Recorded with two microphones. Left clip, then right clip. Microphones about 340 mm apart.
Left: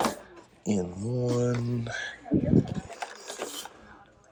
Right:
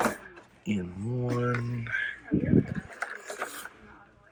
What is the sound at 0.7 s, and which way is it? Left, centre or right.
Speech, centre.